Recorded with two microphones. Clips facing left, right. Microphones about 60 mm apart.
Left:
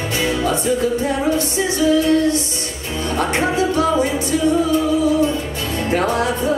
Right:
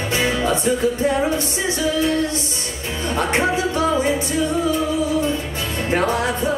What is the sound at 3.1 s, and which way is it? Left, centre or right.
Music, right.